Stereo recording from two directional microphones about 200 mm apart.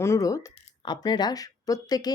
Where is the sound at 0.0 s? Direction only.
15° left (ahead or behind).